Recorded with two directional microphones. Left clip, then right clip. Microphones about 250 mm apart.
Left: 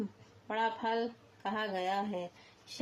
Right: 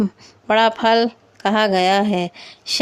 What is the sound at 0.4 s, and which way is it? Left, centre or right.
Speech, right.